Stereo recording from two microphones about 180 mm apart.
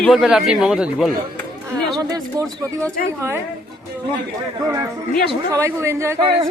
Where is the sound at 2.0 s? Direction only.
20° right (ahead or behind).